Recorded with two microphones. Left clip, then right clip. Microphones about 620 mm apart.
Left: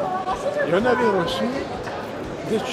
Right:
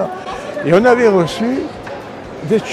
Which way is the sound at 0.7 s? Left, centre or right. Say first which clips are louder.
Right 11 dB; right.